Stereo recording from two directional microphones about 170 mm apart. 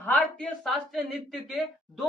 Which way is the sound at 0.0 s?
5° left (ahead or behind).